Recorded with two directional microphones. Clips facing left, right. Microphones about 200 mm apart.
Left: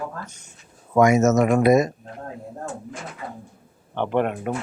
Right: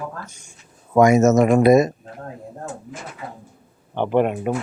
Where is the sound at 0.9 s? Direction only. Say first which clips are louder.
Right 3 dB; 30° right (ahead or behind).